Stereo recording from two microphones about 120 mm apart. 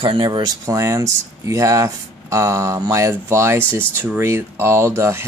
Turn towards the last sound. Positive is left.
turn(degrees=-20)  # may be behind; listen again after turning